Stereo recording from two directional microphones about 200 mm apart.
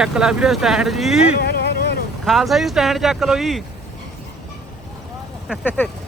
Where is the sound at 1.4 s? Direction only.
55° left (ahead or behind).